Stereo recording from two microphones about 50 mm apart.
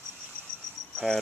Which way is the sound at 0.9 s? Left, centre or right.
Centre.